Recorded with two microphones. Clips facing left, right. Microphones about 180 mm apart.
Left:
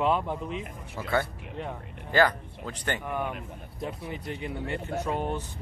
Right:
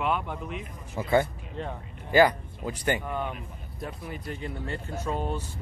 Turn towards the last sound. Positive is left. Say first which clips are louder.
# left 1 dB
turn(degrees=15)  # may be behind; listen again after turning